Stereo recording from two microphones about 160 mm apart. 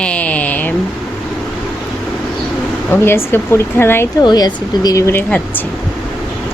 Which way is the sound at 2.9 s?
15° left (ahead or behind).